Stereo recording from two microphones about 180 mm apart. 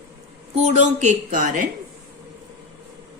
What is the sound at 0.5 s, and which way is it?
Speech, 40° right (ahead or behind).